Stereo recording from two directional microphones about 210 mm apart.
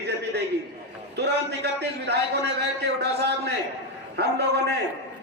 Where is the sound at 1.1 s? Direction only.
50° right (ahead or behind).